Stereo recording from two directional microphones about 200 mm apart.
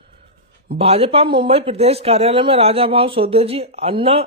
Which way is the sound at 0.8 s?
30° right (ahead or behind).